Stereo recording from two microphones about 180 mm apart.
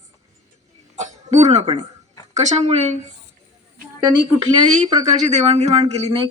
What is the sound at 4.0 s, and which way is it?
Speech, 20° right (ahead or behind).